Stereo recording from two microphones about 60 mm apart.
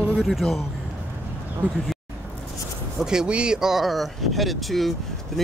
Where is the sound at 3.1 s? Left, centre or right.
Centre.